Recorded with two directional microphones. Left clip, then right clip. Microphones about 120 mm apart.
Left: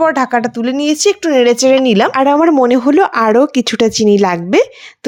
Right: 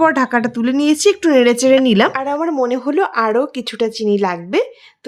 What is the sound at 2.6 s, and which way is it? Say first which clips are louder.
Speech: left 6 dB; 55° left (ahead or behind).